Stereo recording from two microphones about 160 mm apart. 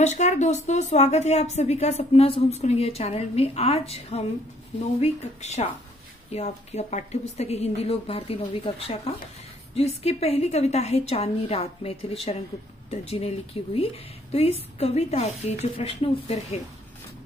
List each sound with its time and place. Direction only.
0.0 s a woman's voice: 45° left (ahead or behind)